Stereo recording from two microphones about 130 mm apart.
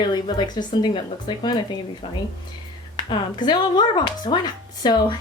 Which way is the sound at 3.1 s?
35° left (ahead or behind).